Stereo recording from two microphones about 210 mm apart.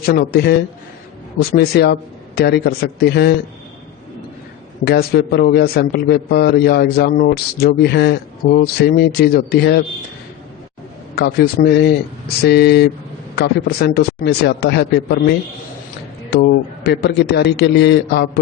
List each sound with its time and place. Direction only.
0.0 s a man's voice: 50° left (ahead or behind)
4.9 s a man's voice: 50° left (ahead or behind)
11.1 s a man's voice: 50° left (ahead or behind)